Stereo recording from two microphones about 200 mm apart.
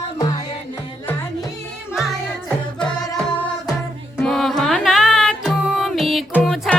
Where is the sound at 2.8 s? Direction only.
5° left (ahead or behind).